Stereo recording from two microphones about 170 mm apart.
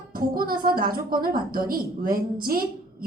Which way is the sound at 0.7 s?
60° right (ahead or behind).